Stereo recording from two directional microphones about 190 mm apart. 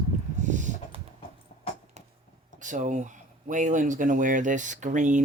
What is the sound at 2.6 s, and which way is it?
Speech, 40° right (ahead or behind).